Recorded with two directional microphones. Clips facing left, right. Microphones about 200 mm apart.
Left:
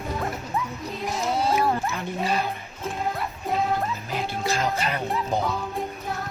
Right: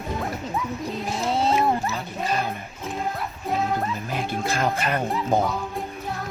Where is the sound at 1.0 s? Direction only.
25° right (ahead or behind).